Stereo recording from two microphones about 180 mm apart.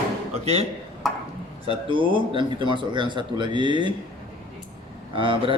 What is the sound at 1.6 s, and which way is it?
Speech, 30° right (ahead or behind).